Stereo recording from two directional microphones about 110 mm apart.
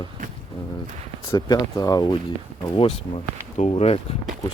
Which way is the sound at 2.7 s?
60° left (ahead or behind).